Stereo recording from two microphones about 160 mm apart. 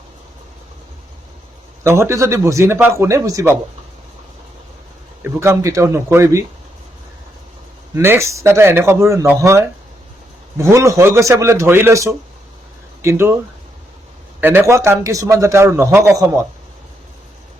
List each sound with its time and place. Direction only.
1.8 s a man's voice: 15° right (ahead or behind)
5.4 s a man's voice: 15° right (ahead or behind)
7.9 s a man's voice: 15° right (ahead or behind)
14.4 s a man's voice: 15° right (ahead or behind)